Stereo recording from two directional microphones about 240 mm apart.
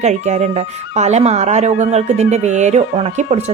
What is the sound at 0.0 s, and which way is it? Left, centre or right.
Speech, right.